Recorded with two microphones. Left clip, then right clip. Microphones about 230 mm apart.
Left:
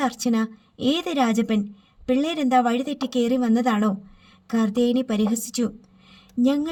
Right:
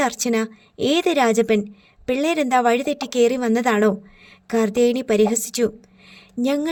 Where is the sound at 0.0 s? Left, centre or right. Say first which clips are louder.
Right 4 dB; right.